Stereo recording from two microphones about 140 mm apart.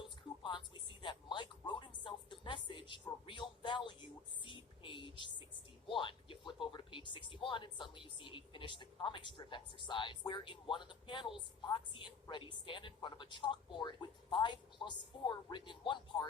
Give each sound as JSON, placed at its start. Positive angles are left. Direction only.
{"t": 0.4, "sound": "a sound", "side_deg": 35}
{"t": 4.4, "sound": "whispering", "side_deg": 35}
{"t": 5.9, "sound": "speech", "side_deg": 35}